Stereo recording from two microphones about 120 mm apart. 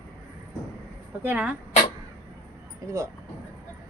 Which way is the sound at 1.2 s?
10° right (ahead or behind).